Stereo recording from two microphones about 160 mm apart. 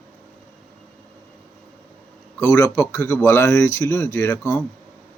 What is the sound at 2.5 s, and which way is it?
Speech, 20° left (ahead or behind).